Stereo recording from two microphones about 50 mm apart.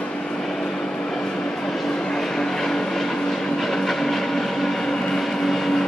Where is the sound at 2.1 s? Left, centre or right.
Centre.